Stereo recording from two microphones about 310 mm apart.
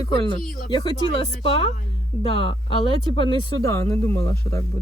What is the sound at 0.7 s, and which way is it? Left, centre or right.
Speech, centre.